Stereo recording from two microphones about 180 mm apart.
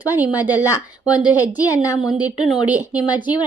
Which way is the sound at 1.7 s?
15° left (ahead or behind).